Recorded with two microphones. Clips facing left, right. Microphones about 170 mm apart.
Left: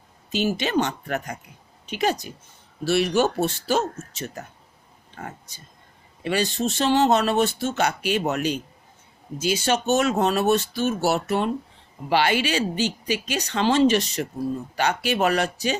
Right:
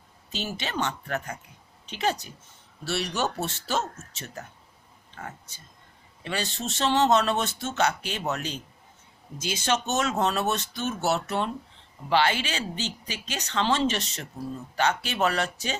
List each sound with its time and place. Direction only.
0.3 s speech: 15° left (ahead or behind)
6.2 s speech: 15° left (ahead or behind)